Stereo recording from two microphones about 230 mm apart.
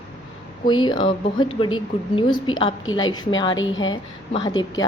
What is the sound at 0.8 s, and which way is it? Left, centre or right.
A woman's voice, left.